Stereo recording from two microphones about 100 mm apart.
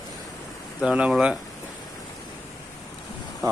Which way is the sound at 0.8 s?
10° right (ahead or behind).